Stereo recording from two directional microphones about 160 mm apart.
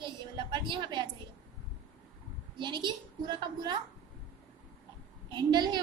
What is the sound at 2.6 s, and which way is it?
A woman's voice, 30° right (ahead or behind).